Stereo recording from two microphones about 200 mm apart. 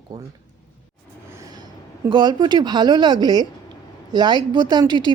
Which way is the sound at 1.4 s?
20° right (ahead or behind).